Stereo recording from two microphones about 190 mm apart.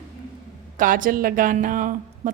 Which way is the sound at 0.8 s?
45° right (ahead or behind).